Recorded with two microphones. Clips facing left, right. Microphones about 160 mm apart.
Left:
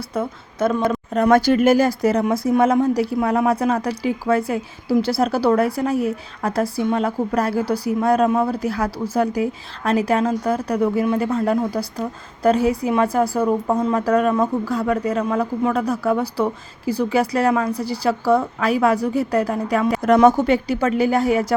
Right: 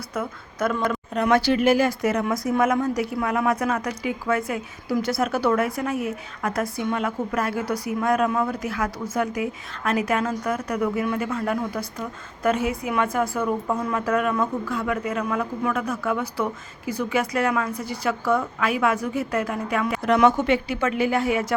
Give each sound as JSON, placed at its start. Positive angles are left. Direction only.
{"t": 0.1, "sound": "speech", "side_deg": 30}
{"t": 1.1, "sound": "a woman's voice", "side_deg": 45}